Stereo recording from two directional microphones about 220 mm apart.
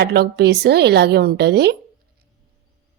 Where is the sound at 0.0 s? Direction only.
50° right (ahead or behind).